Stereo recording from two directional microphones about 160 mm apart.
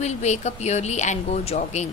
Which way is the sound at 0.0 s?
45° left (ahead or behind).